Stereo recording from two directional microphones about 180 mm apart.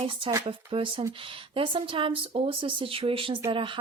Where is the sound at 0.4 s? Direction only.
30° right (ahead or behind).